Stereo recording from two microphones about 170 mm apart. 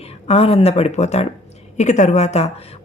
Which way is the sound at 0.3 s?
35° left (ahead or behind).